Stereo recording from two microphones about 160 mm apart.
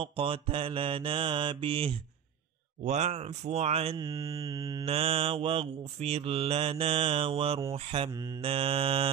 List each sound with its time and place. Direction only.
0.0 s mantra: 35° right (ahead or behind)
2.8 s speech: 45° right (ahead or behind)
3.9 s mantra: 25° right (ahead or behind)
4.8 s mantra: 40° right (ahead or behind)
8.1 s mantra: 25° right (ahead or behind)
8.4 s mantra: 35° right (ahead or behind)